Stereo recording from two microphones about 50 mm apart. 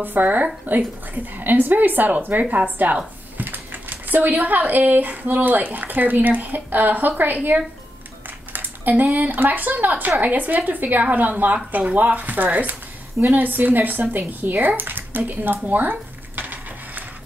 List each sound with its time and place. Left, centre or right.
0.0 s speech: right
8.5 s speech: right